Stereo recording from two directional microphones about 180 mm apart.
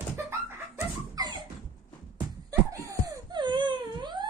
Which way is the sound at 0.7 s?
20° right (ahead or behind).